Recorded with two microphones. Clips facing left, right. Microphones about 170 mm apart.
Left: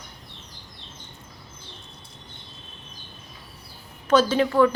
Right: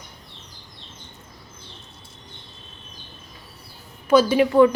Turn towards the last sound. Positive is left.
turn(degrees=-15)  # may be behind; listen again after turning